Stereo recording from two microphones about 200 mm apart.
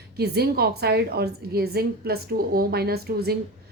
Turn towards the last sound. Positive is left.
turn(degrees=-50)  # may be behind; listen again after turning